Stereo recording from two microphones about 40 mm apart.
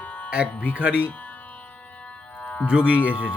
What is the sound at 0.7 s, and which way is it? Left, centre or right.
Speech, right.